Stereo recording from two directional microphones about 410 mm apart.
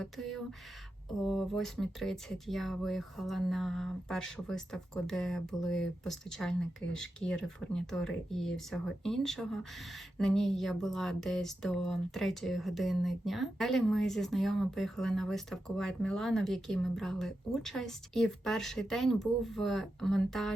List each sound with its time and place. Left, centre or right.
0.0 s speech: centre